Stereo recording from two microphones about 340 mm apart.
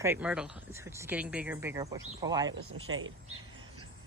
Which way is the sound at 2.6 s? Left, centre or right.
Right.